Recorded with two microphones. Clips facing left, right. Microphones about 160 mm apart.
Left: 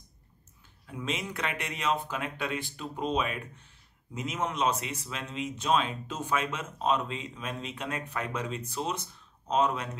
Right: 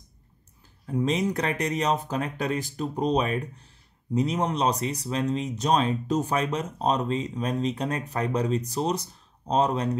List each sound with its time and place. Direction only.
0.8 s speech: 40° right (ahead or behind)